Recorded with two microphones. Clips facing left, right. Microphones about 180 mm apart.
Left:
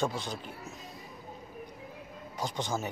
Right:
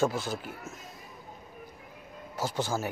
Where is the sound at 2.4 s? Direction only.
5° right (ahead or behind).